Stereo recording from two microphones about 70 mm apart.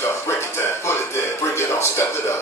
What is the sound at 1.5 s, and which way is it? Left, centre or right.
Speech, left.